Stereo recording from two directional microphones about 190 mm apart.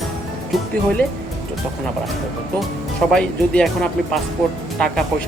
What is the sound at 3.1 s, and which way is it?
Speech, 5° left (ahead or behind).